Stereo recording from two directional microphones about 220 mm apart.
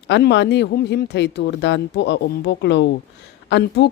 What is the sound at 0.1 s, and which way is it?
Speech, 50° left (ahead or behind).